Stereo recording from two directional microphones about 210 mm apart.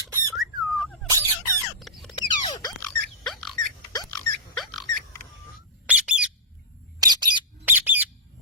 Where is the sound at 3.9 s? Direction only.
15° left (ahead or behind).